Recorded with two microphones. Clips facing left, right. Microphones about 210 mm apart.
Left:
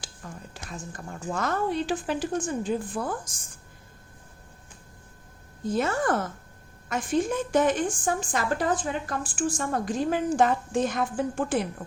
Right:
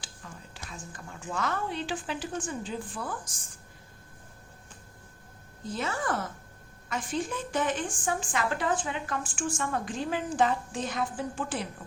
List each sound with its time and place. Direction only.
0.0 s speech: 45° left (ahead or behind)
5.7 s a woman's voice: 45° left (ahead or behind)